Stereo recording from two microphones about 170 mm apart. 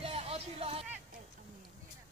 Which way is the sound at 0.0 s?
35° right (ahead or behind).